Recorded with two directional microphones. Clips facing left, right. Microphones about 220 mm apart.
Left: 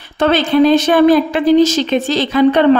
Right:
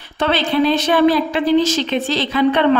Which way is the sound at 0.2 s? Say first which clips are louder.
Left 5 dB; 45° left (ahead or behind).